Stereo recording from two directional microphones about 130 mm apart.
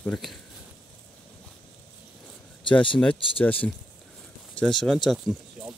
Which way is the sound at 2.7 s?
40° left (ahead or behind).